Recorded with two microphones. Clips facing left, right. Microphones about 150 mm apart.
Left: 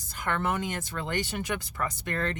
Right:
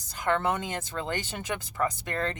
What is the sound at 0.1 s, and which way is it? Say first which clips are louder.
A woman's voice: right 3 dB; 25° right (ahead or behind).